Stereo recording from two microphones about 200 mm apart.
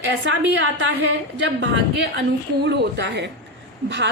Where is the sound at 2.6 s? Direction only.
55° right (ahead or behind).